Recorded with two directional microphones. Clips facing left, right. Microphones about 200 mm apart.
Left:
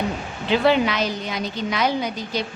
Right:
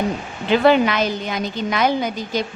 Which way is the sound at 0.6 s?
50° right (ahead or behind).